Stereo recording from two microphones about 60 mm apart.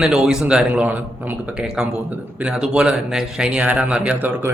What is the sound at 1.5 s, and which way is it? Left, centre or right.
Speech, centre.